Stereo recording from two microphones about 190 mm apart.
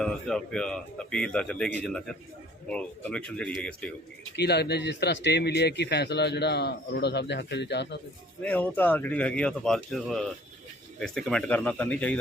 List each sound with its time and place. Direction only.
0.0 s a man's voice: 5° left (ahead or behind)
4.4 s a man's voice: 60° left (ahead or behind)
8.4 s speech: 10° left (ahead or behind)